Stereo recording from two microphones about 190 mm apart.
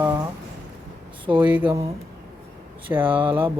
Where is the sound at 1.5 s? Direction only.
10° right (ahead or behind).